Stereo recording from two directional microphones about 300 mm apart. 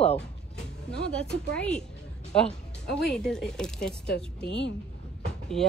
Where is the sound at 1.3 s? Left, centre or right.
Centre.